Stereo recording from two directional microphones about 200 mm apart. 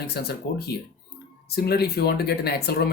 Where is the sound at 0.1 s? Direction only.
55° left (ahead or behind).